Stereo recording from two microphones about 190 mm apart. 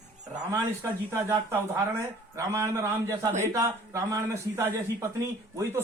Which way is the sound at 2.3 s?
15° right (ahead or behind).